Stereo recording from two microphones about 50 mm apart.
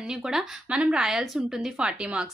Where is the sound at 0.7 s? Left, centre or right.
Right.